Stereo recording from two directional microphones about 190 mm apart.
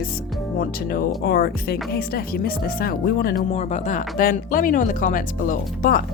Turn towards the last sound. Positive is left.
turn(degrees=45)  # may be behind; listen again after turning